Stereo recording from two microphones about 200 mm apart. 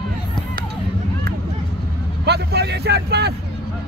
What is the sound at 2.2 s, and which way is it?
Vehicle, 55° right (ahead or behind).